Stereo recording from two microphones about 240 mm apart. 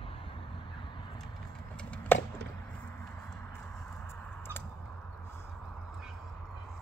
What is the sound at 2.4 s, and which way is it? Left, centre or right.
Chop, right.